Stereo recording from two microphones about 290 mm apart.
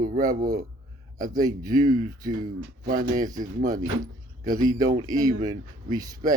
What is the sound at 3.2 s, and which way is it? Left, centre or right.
Speech, centre.